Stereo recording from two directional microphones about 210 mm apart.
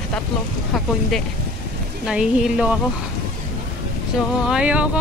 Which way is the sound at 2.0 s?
5° right (ahead or behind).